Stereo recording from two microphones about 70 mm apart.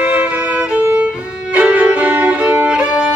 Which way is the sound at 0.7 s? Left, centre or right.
Centre.